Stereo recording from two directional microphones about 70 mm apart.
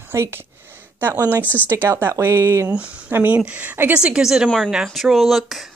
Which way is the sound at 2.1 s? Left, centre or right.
Right.